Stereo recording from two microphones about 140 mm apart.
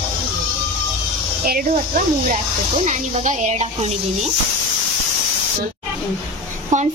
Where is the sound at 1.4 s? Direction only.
90° right.